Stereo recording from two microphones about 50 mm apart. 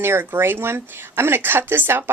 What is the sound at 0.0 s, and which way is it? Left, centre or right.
A woman's voice, right.